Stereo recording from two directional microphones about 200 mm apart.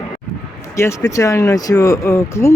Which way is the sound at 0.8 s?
15° left (ahead or behind).